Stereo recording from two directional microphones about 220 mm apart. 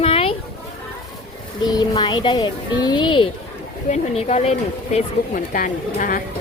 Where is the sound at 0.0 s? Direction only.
25° left (ahead or behind).